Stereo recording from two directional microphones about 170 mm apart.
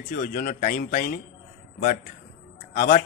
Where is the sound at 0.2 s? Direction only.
55° left (ahead or behind).